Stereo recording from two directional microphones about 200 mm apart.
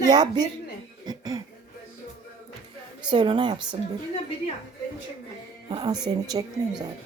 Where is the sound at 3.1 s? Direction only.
20° right (ahead or behind).